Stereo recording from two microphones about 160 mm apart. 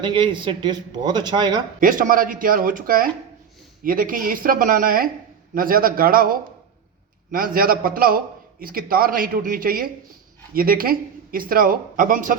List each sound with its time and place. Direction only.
0.0 s speech: 30° right (ahead or behind)
1.8 s a man's voice: 60° right (ahead or behind)